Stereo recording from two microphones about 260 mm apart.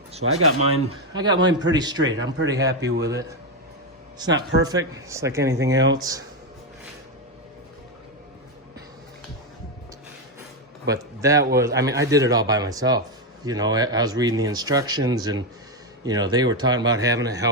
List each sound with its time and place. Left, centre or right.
0.2 s speech: right
1.1 s speech: centre
2.0 s speech: right
2.5 s speech: centre
2.8 s a man's voice: right
4.6 s speech: centre
10.8 s a man's voice: centre